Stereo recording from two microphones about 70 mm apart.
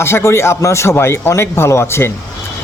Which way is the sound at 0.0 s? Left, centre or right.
Left.